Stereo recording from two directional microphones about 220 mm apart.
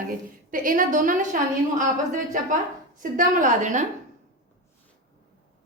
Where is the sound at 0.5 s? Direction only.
40° right (ahead or behind).